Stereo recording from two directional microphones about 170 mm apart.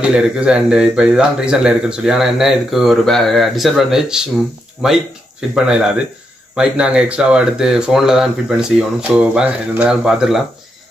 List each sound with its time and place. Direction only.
0.0 s speech: 5° right (ahead or behind)